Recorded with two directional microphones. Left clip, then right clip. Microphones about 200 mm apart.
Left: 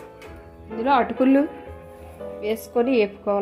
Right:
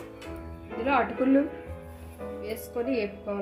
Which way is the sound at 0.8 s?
40° left (ahead or behind).